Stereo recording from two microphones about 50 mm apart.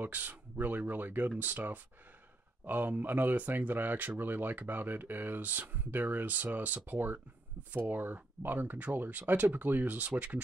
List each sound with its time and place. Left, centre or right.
0.0 s speech: right